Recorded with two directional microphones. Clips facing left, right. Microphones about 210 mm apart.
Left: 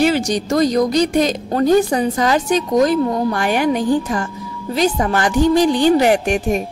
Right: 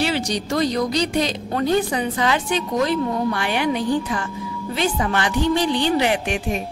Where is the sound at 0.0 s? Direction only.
45° left (ahead or behind).